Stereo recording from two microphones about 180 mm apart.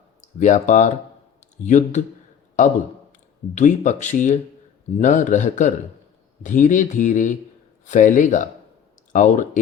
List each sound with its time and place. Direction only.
0.3 s speech: 45° left (ahead or behind)
1.4 s a sound: 40° left (ahead or behind)
3.1 s speech: 45° left (ahead or behind)